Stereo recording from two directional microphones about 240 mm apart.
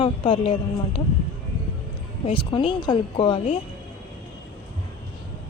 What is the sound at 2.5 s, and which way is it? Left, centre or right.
Speech, left.